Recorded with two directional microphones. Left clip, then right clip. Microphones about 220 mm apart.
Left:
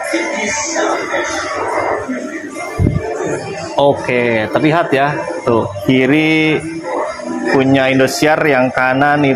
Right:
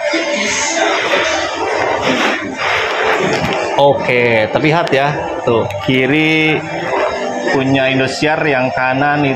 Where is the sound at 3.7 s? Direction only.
40° left (ahead or behind).